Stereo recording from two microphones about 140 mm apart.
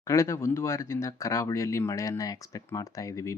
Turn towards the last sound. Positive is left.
turn(degrees=20)  # may be behind; listen again after turning